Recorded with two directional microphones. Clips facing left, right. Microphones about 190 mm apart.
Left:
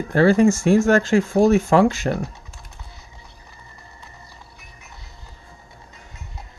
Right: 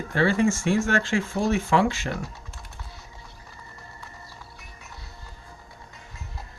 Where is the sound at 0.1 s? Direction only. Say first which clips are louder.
Left 7 dB; 40° left (ahead or behind).